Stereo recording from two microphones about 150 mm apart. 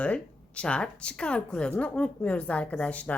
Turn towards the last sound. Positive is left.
turn(degrees=10)  # may be behind; listen again after turning